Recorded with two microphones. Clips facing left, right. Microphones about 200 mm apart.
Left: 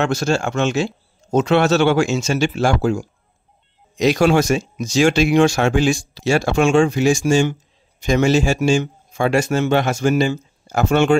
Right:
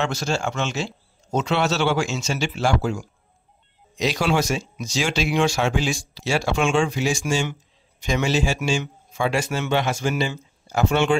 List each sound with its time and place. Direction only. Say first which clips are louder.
0.0 s speech: left 6 dB; 50° left (ahead or behind)